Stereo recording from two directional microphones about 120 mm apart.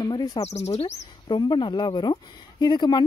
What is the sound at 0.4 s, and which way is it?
Speech, 65° left (ahead or behind).